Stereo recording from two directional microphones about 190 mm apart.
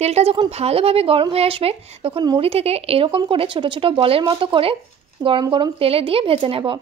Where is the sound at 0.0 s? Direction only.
35° right (ahead or behind).